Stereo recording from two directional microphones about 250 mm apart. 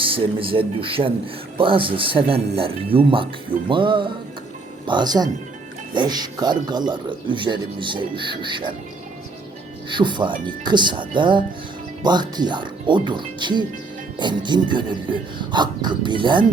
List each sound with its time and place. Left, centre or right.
0.0 s a man's voice: right
9.9 s a man's voice: centre